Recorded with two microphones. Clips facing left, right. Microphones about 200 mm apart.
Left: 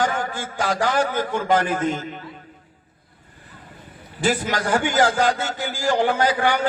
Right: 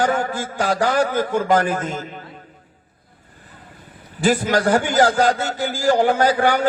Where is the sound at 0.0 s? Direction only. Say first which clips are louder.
Right 4 dB; 40° right (ahead or behind).